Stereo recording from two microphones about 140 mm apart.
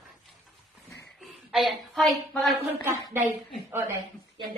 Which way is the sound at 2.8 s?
15° right (ahead or behind).